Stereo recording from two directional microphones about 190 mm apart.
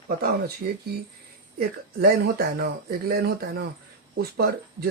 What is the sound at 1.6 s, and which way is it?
Speech, 55° right (ahead or behind).